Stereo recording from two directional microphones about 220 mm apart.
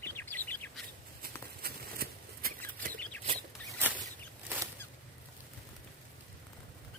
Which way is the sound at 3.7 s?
10° right (ahead or behind).